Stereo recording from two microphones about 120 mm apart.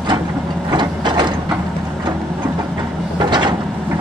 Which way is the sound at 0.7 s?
40° right (ahead or behind).